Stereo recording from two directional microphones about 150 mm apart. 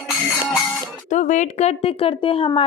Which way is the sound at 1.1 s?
55° left (ahead or behind).